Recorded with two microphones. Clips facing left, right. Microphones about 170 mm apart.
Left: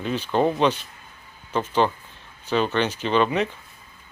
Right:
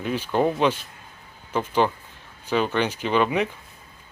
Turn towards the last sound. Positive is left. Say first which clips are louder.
# left 1 dB
turn(degrees=-10)  # may be behind; listen again after turning